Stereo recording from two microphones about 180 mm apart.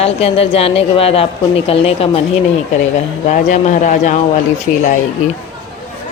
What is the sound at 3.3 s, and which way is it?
Speech, 45° left (ahead or behind).